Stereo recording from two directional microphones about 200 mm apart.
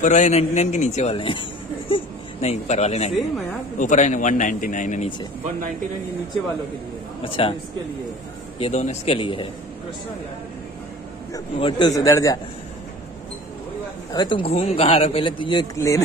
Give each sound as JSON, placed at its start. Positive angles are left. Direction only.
{"t": 0.0, "sound": "a man's voice", "side_deg": 35}
{"t": 2.4, "sound": "a man's voice", "side_deg": 35}
{"t": 7.2, "sound": "a man's voice", "side_deg": 25}
{"t": 8.5, "sound": "a man's voice", "side_deg": 30}
{"t": 11.3, "sound": "a man's voice", "side_deg": 25}
{"t": 14.1, "sound": "a man's voice", "side_deg": 25}